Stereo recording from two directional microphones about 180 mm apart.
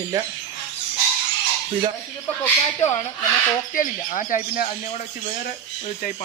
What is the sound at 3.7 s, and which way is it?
Speech, 45° left (ahead or behind).